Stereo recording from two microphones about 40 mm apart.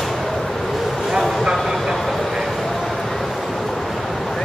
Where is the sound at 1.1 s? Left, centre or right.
Centre.